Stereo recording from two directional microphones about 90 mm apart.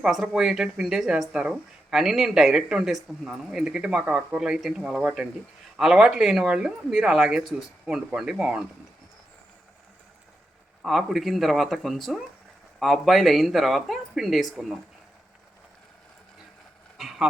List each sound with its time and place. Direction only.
0.0 s speech: 5° right (ahead or behind)
10.8 s speech: centre (ahead or behind)
17.0 s dog: 5° right (ahead or behind)